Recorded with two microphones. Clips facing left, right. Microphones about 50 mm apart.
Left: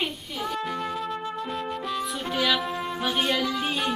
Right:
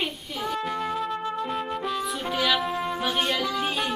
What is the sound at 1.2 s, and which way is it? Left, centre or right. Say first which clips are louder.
Music: right 2 dB; centre.